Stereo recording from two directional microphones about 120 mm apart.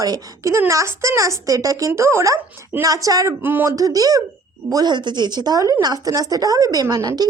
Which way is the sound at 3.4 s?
20° right (ahead or behind).